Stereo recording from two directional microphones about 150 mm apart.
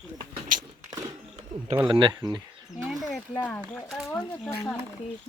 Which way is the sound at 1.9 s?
30° right (ahead or behind).